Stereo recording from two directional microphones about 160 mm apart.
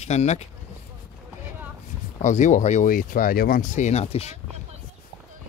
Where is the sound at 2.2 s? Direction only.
50° left (ahead or behind); by 3.6 s 65° left (ahead or behind).